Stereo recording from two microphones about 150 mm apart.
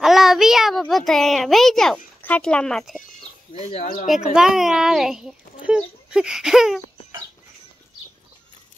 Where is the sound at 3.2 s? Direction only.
45° left (ahead or behind).